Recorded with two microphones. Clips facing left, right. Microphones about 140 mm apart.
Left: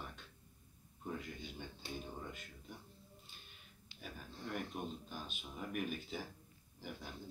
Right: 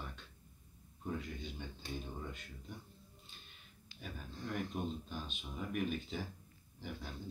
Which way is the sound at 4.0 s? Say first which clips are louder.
Right 2 dB; 5° left (ahead or behind).